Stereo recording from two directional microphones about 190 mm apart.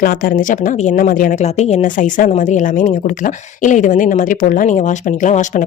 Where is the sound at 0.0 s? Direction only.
45° left (ahead or behind).